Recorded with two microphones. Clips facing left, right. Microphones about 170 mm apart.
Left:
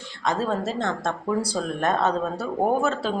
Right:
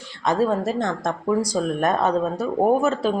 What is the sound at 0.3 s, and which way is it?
Speech, 15° right (ahead or behind).